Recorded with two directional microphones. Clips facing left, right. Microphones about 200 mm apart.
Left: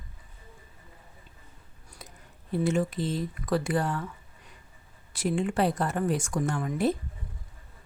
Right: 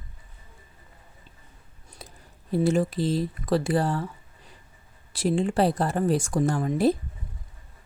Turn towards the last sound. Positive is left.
turn(degrees=-35)  # may be behind; listen again after turning